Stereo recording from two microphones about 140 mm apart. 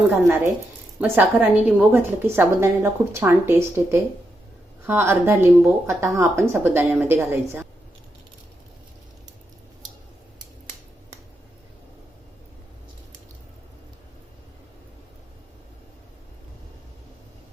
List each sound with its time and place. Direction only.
0.1 s a woman's voice: 20° right (ahead or behind)